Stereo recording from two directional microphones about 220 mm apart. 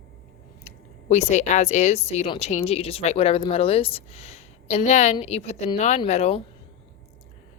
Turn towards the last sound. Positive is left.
turn(degrees=30)  # may be behind; listen again after turning